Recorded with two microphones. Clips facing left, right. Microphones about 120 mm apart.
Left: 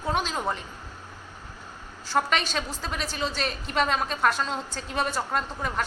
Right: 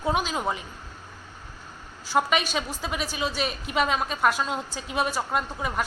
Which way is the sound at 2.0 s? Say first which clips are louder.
Right 2 dB; 5° right (ahead or behind).